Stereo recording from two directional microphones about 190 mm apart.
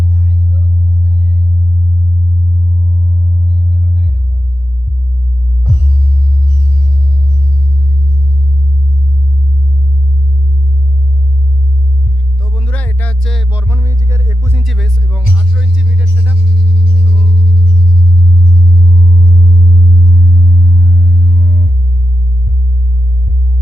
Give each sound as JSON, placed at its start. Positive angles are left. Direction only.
{"t": 12.4, "sound": "music", "side_deg": 5}
{"t": 13.5, "sound": "music", "side_deg": -10}
{"t": 14.6, "sound": "music", "side_deg": 0}
{"t": 15.4, "sound": "speech", "side_deg": -5}
{"t": 20.4, "sound": "music", "side_deg": -50}